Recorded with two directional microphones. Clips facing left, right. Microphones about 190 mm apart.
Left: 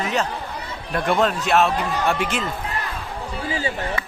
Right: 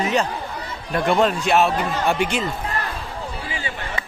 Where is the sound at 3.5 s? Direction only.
40° left (ahead or behind).